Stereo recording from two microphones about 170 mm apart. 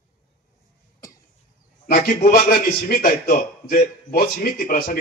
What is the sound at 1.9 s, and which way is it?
A man's voice, 55° left (ahead or behind).